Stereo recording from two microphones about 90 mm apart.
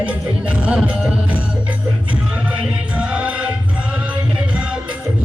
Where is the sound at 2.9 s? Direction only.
15° right (ahead or behind).